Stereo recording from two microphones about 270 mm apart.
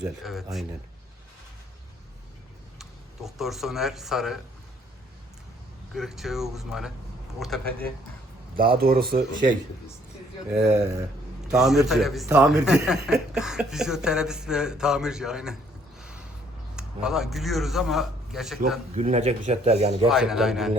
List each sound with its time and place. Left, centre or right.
0.2 s speech: centre
3.2 s speech: centre
5.9 s speech: centre
8.8 s speech: right
10.6 s a man's voice: right
11.5 s speech: centre
16.0 s a sound: centre
16.7 s a man's voice: centre
18.9 s a man's voice: right
20.1 s speech: centre